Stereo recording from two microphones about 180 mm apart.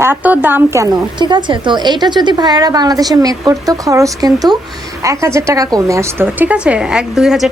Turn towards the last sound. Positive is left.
turn(degrees=0)  # may be behind; listen again after turning